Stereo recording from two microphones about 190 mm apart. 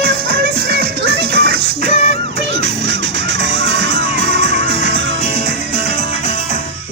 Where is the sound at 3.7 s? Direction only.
60° right (ahead or behind).